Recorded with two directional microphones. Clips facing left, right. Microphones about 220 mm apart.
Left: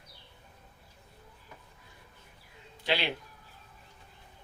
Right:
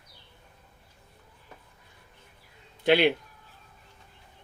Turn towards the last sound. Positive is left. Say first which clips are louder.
# right 10 dB
turn(degrees=-55)  # may be behind; listen again after turning